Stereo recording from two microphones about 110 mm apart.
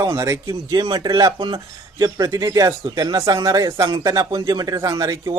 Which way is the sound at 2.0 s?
35° right (ahead or behind).